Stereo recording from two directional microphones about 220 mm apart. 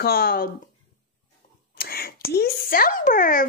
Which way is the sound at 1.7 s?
45° left (ahead or behind).